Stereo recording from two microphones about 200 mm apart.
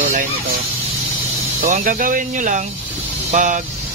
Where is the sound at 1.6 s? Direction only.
45° right (ahead or behind).